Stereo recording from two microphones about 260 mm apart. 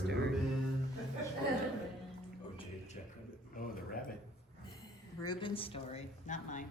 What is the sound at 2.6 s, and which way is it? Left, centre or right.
Music, left.